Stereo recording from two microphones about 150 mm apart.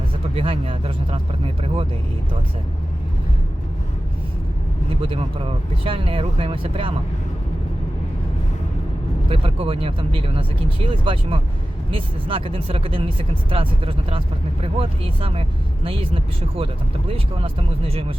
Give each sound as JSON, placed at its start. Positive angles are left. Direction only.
{"t": 0.3, "sound": "speech", "side_deg": -40}
{"t": 5.0, "sound": "speech", "side_deg": -35}
{"t": 9.3, "sound": "speech", "side_deg": -40}